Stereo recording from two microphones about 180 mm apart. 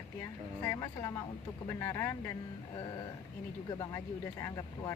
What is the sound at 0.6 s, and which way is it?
Speech, 15° left (ahead or behind).